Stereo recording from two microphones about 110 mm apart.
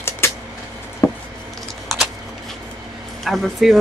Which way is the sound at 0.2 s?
25° left (ahead or behind).